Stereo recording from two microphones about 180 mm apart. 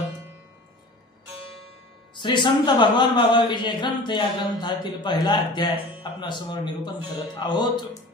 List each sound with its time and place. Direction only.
2.1 s a man's voice: 25° left (ahead or behind)